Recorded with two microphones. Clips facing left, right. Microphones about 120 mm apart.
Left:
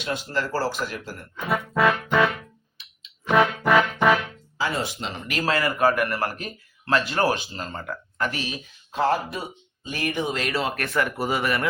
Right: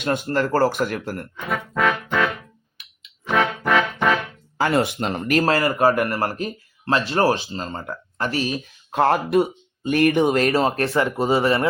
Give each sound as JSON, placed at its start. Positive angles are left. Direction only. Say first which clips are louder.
{"t": 0.0, "sound": "speech", "louder": "right 6 dB", "side_deg": -55}
{"t": 1.5, "sound": "music", "louder": "left 1 dB", "side_deg": 5}
{"t": 4.5, "sound": "speech", "louder": "right 7 dB", "side_deg": -55}
{"t": 8.9, "sound": "speech", "louder": "right 5 dB", "side_deg": -60}